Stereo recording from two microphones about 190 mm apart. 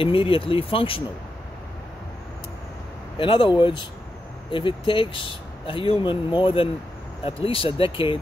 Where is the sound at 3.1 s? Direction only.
25° left (ahead or behind).